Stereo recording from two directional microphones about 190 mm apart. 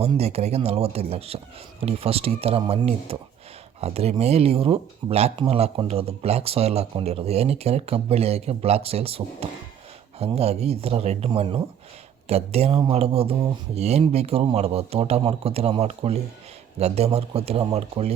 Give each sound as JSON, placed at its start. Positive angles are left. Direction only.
{"t": 0.0, "sound": "speech", "side_deg": -30}